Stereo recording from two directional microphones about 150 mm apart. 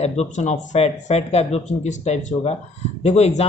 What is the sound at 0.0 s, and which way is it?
Speech, 45° left (ahead or behind).